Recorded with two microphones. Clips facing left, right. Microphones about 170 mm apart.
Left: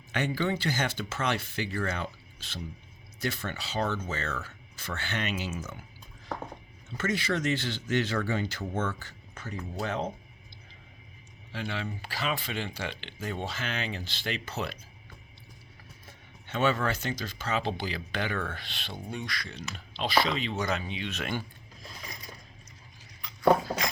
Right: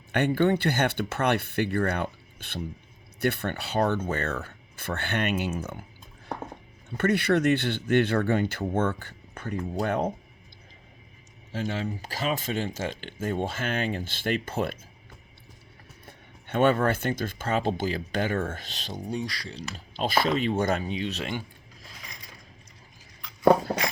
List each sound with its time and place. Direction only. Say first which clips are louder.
0.1 s speech: right 7 dB; 55° right (ahead or behind)
6.9 s speech: right 7 dB; 60° right (ahead or behind)
11.5 s speech: right 5 dB; 40° right (ahead or behind)
16.0 s speech: right 5 dB; 55° right (ahead or behind); by 20.1 s 35° right (ahead or behind)
20.1 s speech: right 3 dB; 50° right (ahead or behind)